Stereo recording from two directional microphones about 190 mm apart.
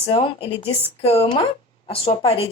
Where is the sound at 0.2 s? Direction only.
30° left (ahead or behind).